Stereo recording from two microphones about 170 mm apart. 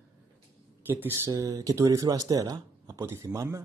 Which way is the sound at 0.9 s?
15° right (ahead or behind).